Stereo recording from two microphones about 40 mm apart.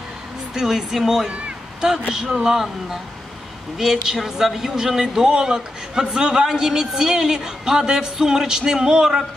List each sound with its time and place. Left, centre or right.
0.6 s a man's voice: centre